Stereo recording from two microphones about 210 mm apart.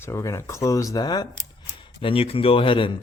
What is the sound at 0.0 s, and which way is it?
Speech, 15° left (ahead or behind).